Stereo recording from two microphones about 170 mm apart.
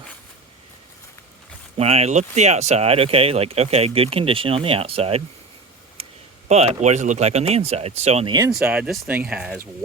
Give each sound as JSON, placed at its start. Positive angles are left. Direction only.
{"t": 1.8, "sound": "speech", "side_deg": -40}
{"t": 6.5, "sound": "speech", "side_deg": -40}
{"t": 8.3, "sound": "speech", "side_deg": -20}
{"t": 8.5, "sound": "speech", "side_deg": -5}